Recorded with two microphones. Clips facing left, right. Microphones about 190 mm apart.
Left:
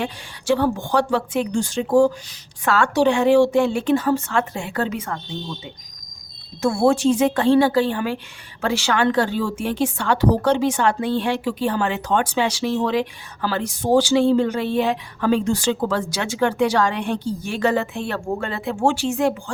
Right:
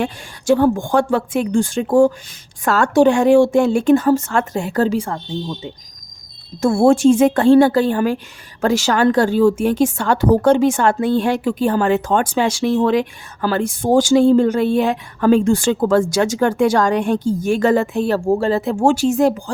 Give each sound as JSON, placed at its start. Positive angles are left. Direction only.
{"t": 0.0, "sound": "a woman's voice", "side_deg": -45}
{"t": 6.6, "sound": "a woman's voice", "side_deg": -45}